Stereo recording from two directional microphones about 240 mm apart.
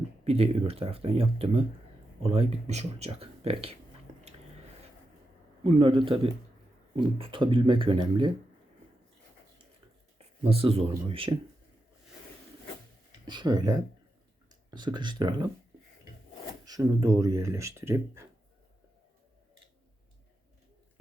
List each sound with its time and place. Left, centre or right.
0.3 s speech: right
4.1 s squish: right
5.6 s speech: right
10.2 s speech: right
13.2 s speech: centre
16.6 s speech: centre